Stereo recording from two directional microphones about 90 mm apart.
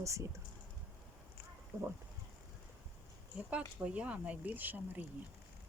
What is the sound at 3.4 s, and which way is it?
Speech, 15° right (ahead or behind).